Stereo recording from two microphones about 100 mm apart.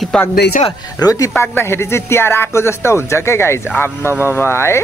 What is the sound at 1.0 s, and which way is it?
Speech, 35° left (ahead or behind).